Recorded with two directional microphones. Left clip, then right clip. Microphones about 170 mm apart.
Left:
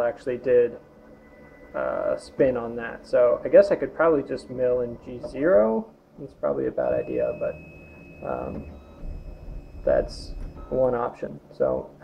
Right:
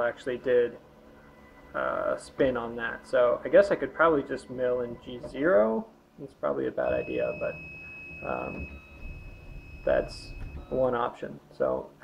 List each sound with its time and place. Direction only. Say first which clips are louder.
0.3 s speech: left 5 dB; 15° right (ahead or behind)
1.7 s speech: left 3 dB; 15° right (ahead or behind)
10.7 s speech: left 4 dB; 15° right (ahead or behind)